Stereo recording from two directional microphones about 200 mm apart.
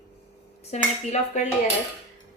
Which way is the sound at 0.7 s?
35° left (ahead or behind).